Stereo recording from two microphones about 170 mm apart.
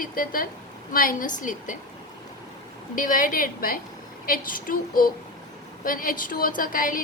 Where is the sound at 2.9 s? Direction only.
55° left (ahead or behind).